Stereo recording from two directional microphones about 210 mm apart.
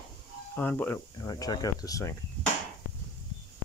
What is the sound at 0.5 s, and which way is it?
Speech, 10° left (ahead or behind).